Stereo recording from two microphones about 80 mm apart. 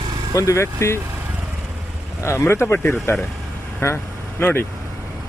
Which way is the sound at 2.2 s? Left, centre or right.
Left.